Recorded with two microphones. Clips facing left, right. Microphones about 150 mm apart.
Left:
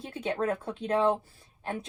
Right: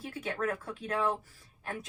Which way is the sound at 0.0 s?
25° left (ahead or behind).